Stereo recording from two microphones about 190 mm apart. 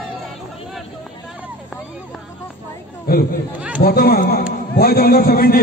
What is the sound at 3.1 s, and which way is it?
A man's voice, 50° left (ahead or behind).